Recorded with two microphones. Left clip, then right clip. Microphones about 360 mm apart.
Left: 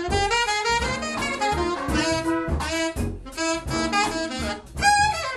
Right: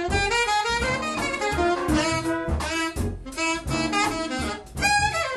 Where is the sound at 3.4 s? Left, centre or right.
Left.